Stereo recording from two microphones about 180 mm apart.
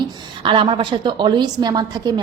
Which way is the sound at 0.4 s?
30° right (ahead or behind).